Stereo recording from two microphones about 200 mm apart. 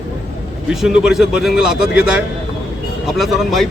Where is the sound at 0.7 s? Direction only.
Centre (ahead or behind).